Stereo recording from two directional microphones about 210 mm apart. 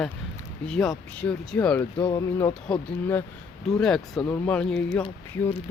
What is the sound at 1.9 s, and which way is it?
Speech, 25° left (ahead or behind).